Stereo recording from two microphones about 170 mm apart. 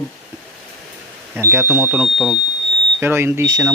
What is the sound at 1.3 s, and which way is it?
Speech, 10° right (ahead or behind).